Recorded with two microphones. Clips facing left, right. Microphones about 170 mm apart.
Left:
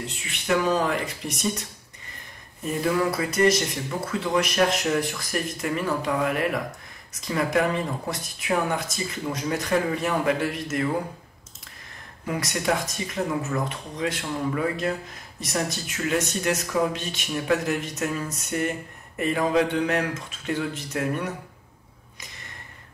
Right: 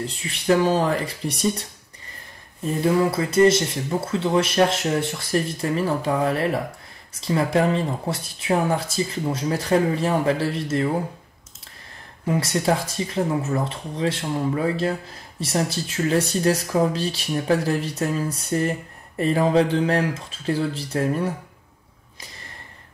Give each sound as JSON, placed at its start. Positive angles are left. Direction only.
{"t": 0.0, "sound": "speech", "side_deg": -30}
{"t": 12.3, "sound": "speech", "side_deg": -30}